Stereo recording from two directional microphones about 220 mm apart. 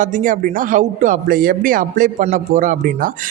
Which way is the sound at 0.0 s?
35° right (ahead or behind).